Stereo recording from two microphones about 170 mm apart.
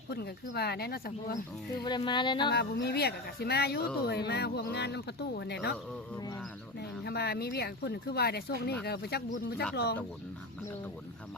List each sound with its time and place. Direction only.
0.1 s speech: 70° left (ahead or behind)
1.8 s music: 25° left (ahead or behind)
2.5 s speech: 70° left (ahead or behind)
7.0 s speech: 70° left (ahead or behind)